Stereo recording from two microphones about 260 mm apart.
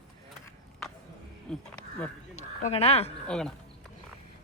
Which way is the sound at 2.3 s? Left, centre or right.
Left.